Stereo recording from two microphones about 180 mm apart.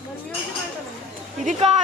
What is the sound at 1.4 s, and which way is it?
Speech, 40° right (ahead or behind).